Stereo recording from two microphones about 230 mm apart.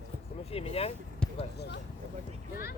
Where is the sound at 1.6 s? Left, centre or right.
Left.